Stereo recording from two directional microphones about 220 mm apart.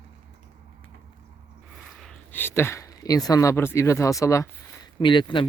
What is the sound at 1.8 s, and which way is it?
Speech, centre (ahead or behind).